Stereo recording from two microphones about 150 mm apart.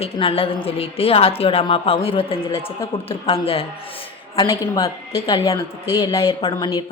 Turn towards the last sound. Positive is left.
turn(degrees=30)  # may be behind; listen again after turning